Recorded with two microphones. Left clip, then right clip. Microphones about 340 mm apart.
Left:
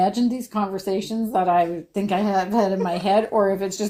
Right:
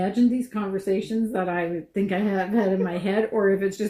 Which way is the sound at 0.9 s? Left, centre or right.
Left.